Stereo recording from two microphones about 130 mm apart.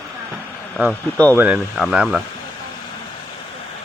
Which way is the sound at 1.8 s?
Centre (ahead or behind).